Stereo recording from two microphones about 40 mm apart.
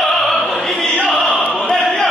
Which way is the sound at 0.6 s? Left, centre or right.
Centre.